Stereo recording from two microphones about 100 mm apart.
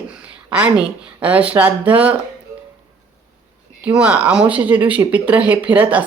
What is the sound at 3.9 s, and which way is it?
Speech, 10° right (ahead or behind).